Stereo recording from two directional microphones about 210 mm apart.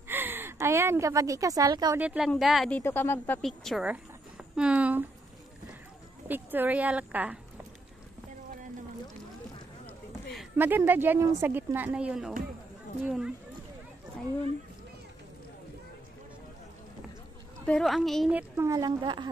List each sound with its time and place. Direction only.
0.1 s a woman's voice: 10° right (ahead or behind)
2.0 s speech: 5° right (ahead or behind)
6.2 s speech: 10° right (ahead or behind)
10.5 s speech: 10° right (ahead or behind)
17.6 s speech: centre (ahead or behind)
18.6 s a woman's voice: 15° right (ahead or behind)